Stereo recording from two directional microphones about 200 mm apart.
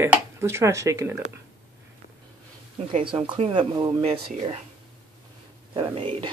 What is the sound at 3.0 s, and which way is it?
Speech, 25° right (ahead or behind).